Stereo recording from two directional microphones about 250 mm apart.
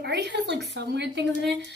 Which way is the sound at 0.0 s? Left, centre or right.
Right.